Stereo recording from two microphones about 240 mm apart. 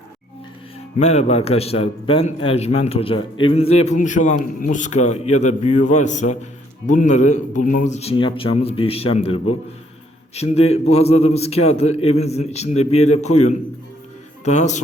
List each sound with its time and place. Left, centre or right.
0.9 s a man's voice: left
14.4 s a man's voice: left